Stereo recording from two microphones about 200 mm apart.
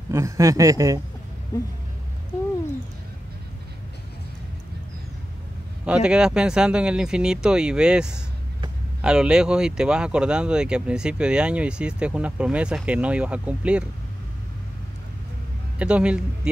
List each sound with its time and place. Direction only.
0.1 s speech: 15° right (ahead or behind)
5.9 s speech: 5° right (ahead or behind)
15.8 s speech: 5° right (ahead or behind)